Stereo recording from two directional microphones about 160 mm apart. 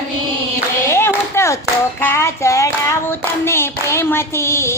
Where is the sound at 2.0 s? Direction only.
15° left (ahead or behind).